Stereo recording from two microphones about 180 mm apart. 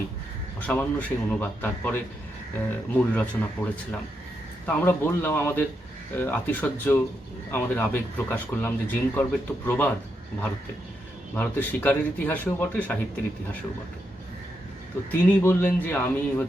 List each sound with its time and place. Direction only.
0.7 s speech: 10° left (ahead or behind)
11.3 s speech: 10° left (ahead or behind)
15.1 s speech: 10° left (ahead or behind)